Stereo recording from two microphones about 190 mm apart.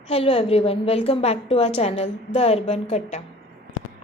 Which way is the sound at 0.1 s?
30° left (ahead or behind).